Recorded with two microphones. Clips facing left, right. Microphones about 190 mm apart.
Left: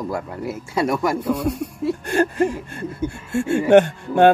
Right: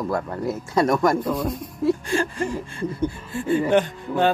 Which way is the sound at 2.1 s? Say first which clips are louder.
Left 5 dB; 60° left (ahead or behind).